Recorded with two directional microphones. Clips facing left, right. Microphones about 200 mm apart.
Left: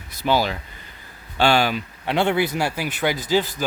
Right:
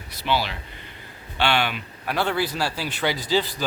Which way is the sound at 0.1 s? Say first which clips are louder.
Left 4 dB; 45° left (ahead or behind).